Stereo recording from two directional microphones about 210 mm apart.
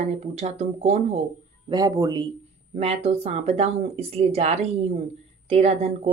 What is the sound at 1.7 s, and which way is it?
Speech, 15° right (ahead or behind).